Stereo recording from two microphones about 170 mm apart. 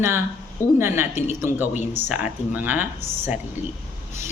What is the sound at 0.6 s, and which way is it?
Speech, 15° left (ahead or behind).